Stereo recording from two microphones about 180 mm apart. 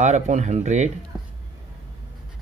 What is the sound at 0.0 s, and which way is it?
Speech, 40° right (ahead or behind).